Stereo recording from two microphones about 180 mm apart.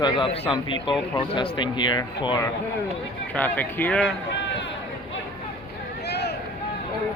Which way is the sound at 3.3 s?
10° left (ahead or behind).